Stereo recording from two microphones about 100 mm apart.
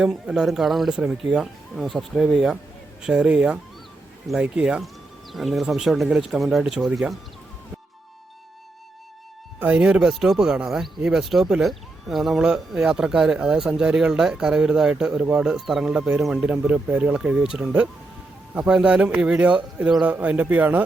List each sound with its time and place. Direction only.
0.0 s speech: 5° right (ahead or behind)
9.6 s speech: 10° right (ahead or behind)